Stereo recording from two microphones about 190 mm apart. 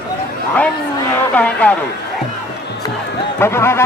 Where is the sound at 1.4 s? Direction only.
5° left (ahead or behind).